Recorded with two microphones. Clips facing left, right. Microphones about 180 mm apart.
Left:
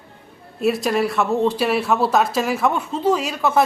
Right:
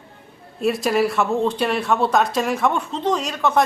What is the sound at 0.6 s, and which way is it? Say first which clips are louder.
Speech: even; centre (ahead or behind).